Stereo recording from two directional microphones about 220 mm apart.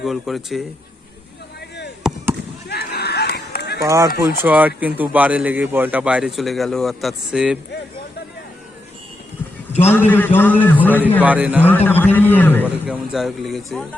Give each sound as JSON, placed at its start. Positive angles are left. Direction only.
{"t": 0.0, "sound": "speech", "side_deg": 0}
{"t": 2.0, "sound": "fireworks", "side_deg": 0}
{"t": 2.6, "sound": "run", "side_deg": 45}
{"t": 3.8, "sound": "a man's voice", "side_deg": -15}
{"t": 10.1, "sound": "a man's voice", "side_deg": 10}
{"t": 11.2, "sound": "a man's voice", "side_deg": -5}
{"t": 11.6, "sound": "a man's voice", "side_deg": 10}
{"t": 12.6, "sound": "speech", "side_deg": -5}